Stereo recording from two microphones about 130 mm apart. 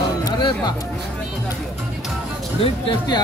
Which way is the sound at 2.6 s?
40° left (ahead or behind).